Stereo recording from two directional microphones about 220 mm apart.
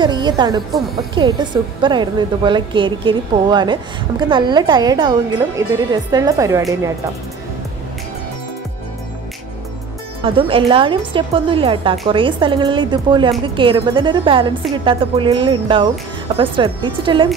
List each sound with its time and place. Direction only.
0.0 s a woman's voice: 20° right (ahead or behind)
10.2 s a woman's voice: 25° right (ahead or behind)